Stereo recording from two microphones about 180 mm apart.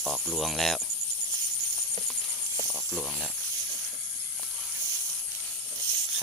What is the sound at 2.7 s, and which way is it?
Speech, 5° right (ahead or behind).